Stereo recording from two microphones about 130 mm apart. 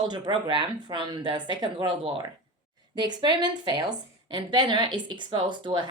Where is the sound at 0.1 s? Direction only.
35° right (ahead or behind).